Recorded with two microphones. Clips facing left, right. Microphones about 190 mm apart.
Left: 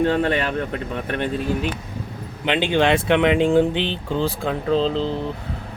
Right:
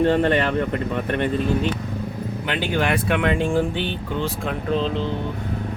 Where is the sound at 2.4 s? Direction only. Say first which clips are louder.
Left 5 dB; 25° left (ahead or behind).